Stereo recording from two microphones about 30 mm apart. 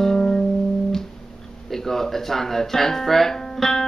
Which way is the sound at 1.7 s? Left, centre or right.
Centre.